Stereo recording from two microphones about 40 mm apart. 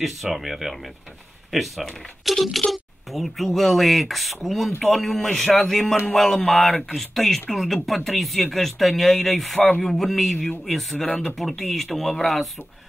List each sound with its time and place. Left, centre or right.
0.0 s speech: centre